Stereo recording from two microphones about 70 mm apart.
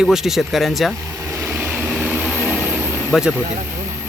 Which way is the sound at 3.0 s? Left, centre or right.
Centre.